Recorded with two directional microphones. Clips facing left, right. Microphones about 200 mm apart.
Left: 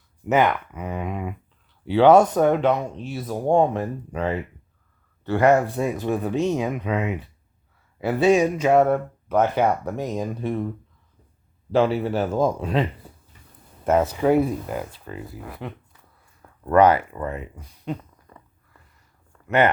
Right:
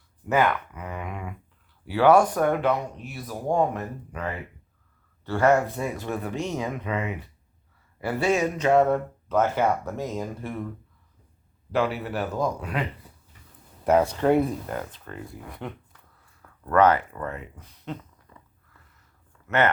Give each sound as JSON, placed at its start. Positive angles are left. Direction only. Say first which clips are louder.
{"t": 0.3, "sound": "speech", "louder": "left 3 dB", "side_deg": 20}
{"t": 5.2, "sound": "a man's voice", "louder": "left 3 dB", "side_deg": 15}
{"t": 11.7, "sound": "speech", "louder": "left 6 dB", "side_deg": 30}
{"t": 13.8, "sound": "speech", "louder": "left 1 dB", "side_deg": 0}
{"t": 16.4, "sound": "a sound", "louder": "left 4 dB", "side_deg": 25}
{"t": 16.8, "sound": "speech", "louder": "even", "side_deg": 10}
{"t": 18.3, "sound": "a sound", "louder": "left 4 dB", "side_deg": 55}
{"t": 19.5, "sound": "speech", "louder": "left 4 dB", "side_deg": 15}